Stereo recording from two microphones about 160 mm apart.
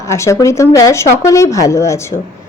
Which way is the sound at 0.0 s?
20° left (ahead or behind).